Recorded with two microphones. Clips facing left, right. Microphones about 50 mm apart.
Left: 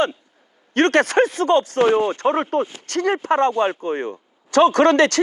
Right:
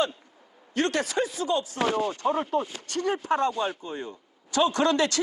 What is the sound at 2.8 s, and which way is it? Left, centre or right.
Speech, left.